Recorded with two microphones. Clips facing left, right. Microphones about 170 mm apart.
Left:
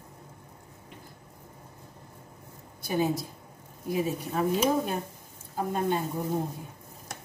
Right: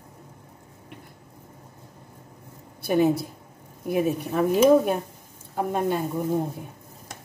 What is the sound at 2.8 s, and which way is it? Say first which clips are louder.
Speech: right 7 dB; 65° right (ahead or behind).